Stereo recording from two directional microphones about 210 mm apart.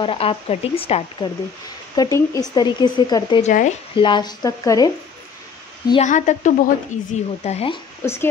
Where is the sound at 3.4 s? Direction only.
35° left (ahead or behind).